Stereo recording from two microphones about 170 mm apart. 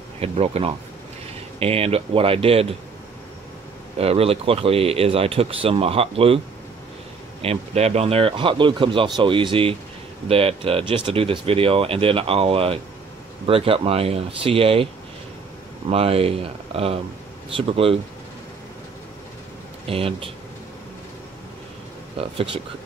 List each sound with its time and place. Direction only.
0.2 s speech: 35° right (ahead or behind)
4.0 s speech: 35° right (ahead or behind)
7.4 s speech: 40° right (ahead or behind)
15.9 s speech: 35° right (ahead or behind)
19.9 s speech: 35° right (ahead or behind)
22.1 s speech: 35° right (ahead or behind)